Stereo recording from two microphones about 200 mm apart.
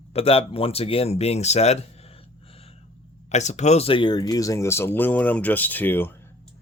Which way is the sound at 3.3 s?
35° left (ahead or behind).